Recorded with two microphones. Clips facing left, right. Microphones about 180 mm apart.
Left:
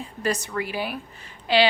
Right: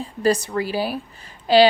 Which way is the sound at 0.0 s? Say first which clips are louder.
Right 7 dB; 35° right (ahead or behind).